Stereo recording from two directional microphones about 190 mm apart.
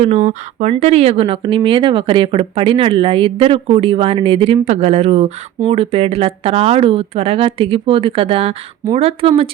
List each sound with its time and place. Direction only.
0.0 s speech: 35° right (ahead or behind)